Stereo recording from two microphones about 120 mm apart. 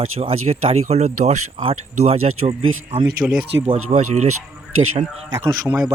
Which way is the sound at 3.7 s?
70° right (ahead or behind).